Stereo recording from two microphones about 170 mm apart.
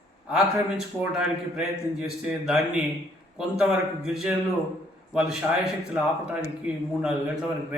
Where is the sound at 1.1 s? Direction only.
5° right (ahead or behind).